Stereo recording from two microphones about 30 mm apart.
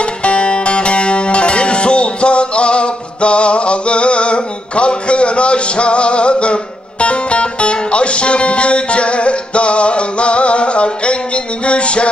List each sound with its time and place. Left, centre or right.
0.2 s music: left